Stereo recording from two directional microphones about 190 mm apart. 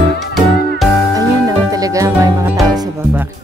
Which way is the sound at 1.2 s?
20° right (ahead or behind).